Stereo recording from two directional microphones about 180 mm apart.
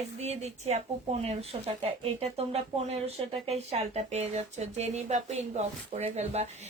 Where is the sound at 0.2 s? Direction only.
40° right (ahead or behind).